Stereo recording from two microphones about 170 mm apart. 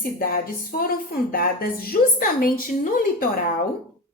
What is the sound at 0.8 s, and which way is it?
A woman's voice, 60° left (ahead or behind).